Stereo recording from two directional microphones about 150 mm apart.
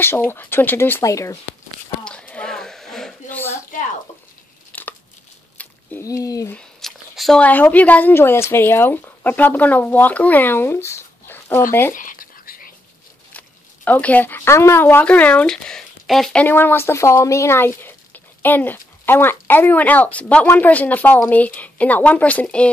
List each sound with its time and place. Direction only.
0.0 s a woman's voice: 15° left (ahead or behind)
2.0 s a sound: 10° left (ahead or behind)
4.7 s a sound: 10° left (ahead or behind)
6.0 s speech: 25° left (ahead or behind)
6.5 s speech: centre (ahead or behind)
11.9 s whispering: 65° left (ahead or behind)
13.3 s speech: 10° left (ahead or behind)
16.4 s a woman's voice: 15° left (ahead or behind)